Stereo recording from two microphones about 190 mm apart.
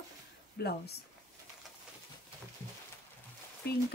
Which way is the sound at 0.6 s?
60° left (ahead or behind).